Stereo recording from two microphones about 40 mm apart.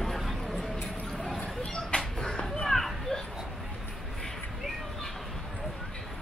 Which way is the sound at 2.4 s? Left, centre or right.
Centre.